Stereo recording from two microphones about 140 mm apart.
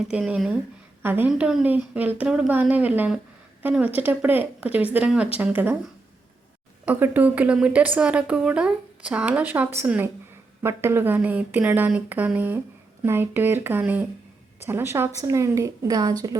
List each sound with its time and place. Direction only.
0.1 s speech: 5° right (ahead or behind)
1.0 s speech: 15° right (ahead or behind)
1.3 s speech: 5° right (ahead or behind)
6.8 s a woman's voice: 10° right (ahead or behind)